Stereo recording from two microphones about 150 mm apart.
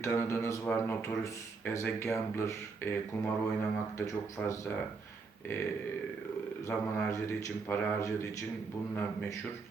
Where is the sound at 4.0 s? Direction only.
20° left (ahead or behind).